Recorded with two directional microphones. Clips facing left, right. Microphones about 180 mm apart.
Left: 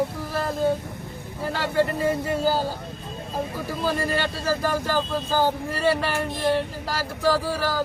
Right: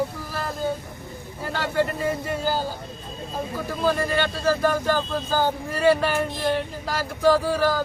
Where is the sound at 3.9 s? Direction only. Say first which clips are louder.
Right 3 dB; 5° left (ahead or behind).